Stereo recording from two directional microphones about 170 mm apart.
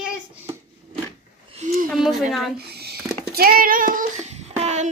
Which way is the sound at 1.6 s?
45° right (ahead or behind).